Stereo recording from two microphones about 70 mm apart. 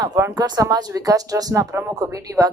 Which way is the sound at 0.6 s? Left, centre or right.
Right.